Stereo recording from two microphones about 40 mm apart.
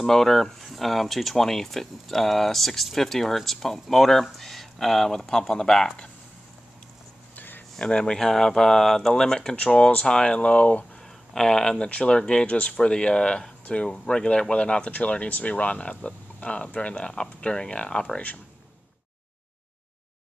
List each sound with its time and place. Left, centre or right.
0.0 s speech: centre
7.3 s a sound: left
7.8 s speech: left
11.3 s speech: centre
11.9 s speech: left
12.4 s speech: left
14.9 s speech: left
18.1 s speech: left